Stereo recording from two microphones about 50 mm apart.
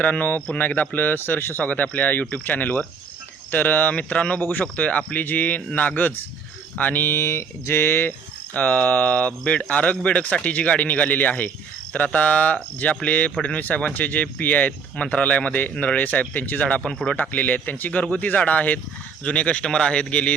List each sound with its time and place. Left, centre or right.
0.0 s speech: left
0.9 s speech: left
1.6 s speech: left
4.4 s speech: left
4.6 s speech: left
5.1 s speech: left
7.2 s speech: left
8.5 s speech: left
17.3 s speech: left